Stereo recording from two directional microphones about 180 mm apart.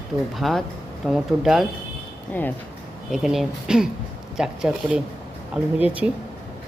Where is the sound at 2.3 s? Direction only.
10° left (ahead or behind).